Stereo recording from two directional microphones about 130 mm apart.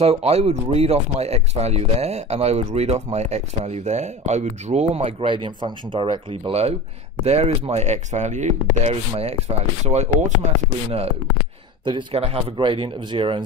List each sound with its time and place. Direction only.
0.0 s speech: 50° right (ahead or behind)
9.1 s speech: 50° right (ahead or behind)